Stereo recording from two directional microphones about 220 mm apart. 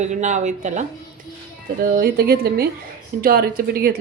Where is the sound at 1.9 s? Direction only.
45° right (ahead or behind).